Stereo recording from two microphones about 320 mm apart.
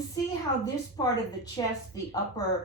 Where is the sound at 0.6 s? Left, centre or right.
Centre.